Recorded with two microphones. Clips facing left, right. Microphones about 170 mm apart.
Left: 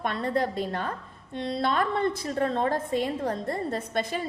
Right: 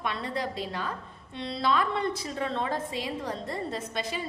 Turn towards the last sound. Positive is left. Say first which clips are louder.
# left 4 dB
turn(degrees=50)  # may be behind; listen again after turning